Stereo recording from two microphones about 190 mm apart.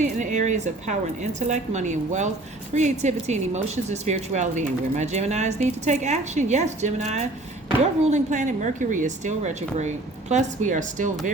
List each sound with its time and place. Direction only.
0.0 s speech: 40° right (ahead or behind)